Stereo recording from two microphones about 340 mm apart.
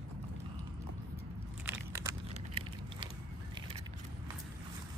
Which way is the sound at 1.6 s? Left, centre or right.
Centre.